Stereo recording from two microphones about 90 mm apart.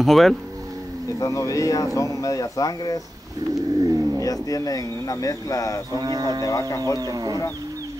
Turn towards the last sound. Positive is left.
turn(degrees=-45)  # may be behind; listen again after turning